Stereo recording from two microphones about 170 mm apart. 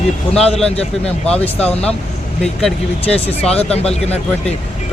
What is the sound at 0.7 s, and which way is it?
Speech, 35° left (ahead or behind).